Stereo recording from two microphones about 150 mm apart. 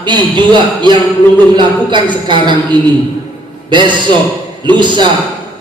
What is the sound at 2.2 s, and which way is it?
A man's voice, 30° right (ahead or behind).